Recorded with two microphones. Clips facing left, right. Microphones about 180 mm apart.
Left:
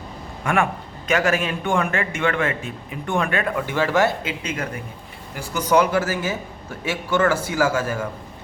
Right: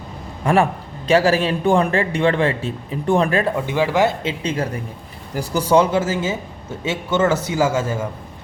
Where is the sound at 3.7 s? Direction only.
15° right (ahead or behind).